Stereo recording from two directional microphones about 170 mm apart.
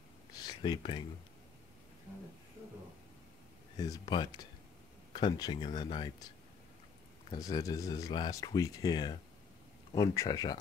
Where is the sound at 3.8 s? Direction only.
25° left (ahead or behind).